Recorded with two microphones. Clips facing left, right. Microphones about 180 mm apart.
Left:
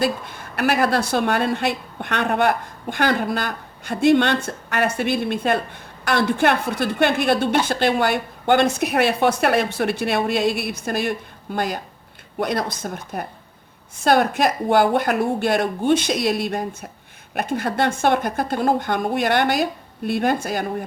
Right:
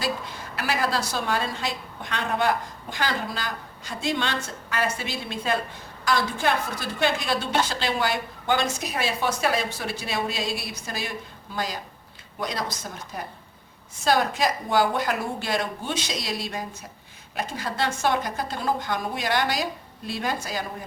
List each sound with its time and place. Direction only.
0.0 s a woman's voice: 55° left (ahead or behind)